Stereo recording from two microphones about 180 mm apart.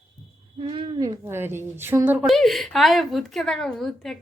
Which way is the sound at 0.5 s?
30° right (ahead or behind).